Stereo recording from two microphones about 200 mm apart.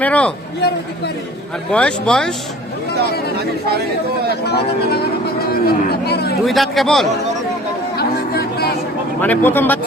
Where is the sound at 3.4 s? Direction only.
50° right (ahead or behind).